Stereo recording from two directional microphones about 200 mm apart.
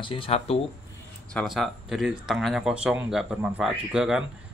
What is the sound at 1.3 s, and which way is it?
Speech, centre (ahead or behind).